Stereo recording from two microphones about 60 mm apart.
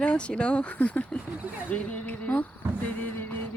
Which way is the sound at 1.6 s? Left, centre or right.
Left.